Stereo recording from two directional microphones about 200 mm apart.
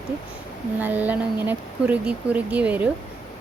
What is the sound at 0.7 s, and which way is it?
A woman's voice, 10° right (ahead or behind).